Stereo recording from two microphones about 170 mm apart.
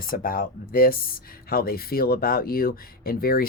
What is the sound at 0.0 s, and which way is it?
Speech, 55° left (ahead or behind).